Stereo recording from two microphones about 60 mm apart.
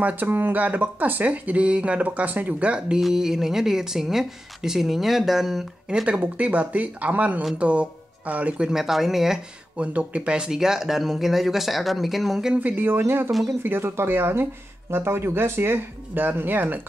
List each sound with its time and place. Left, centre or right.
0.0 s speech: right
3.0 s speech: centre
6.0 s speech: right
8.6 s speech: centre
9.8 s speech: centre
12.5 s speech: right
13.0 s speech: right
13.3 s speech: centre
13.6 s speech: right